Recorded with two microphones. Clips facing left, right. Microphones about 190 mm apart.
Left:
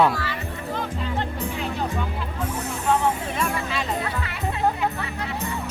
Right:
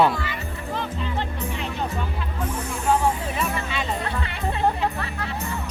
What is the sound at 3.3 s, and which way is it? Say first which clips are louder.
Music: left 1 dB; centre (ahead or behind).